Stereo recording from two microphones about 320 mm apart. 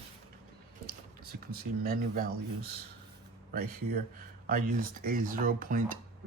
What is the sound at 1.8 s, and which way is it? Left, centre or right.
Speech, right.